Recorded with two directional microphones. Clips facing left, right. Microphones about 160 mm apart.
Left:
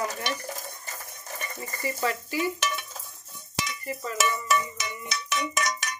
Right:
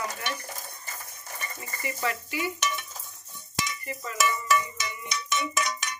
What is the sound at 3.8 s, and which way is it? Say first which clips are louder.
Stir: left 3 dB; 35° left (ahead or behind).